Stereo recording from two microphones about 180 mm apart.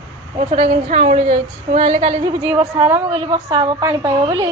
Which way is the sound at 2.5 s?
10° right (ahead or behind).